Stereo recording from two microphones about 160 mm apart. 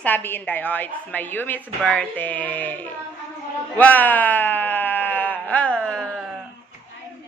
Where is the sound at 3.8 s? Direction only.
10° left (ahead or behind).